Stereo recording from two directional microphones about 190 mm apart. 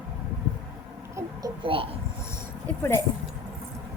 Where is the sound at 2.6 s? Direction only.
15° left (ahead or behind).